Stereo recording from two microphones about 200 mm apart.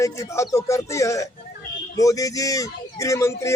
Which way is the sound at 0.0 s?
15° left (ahead or behind).